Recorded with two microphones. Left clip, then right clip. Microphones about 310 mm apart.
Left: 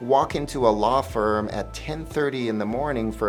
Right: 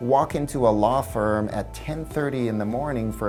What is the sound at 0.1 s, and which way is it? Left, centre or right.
Speech, right.